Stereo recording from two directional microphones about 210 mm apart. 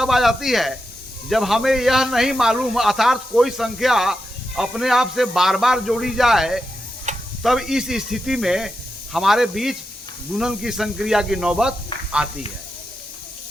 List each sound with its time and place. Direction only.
0.0 s speech: centre (ahead or behind)
7.1 s tick-tock: 35° right (ahead or behind)
7.4 s speech: centre (ahead or behind)